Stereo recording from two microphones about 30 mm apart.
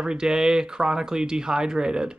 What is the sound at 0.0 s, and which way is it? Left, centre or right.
Speech, right.